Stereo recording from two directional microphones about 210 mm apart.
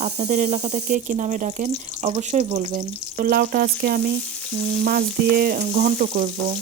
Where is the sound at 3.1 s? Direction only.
45° right (ahead or behind).